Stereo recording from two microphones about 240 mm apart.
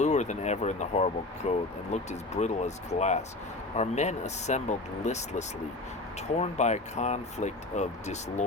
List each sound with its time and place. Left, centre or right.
0.0 s speech: left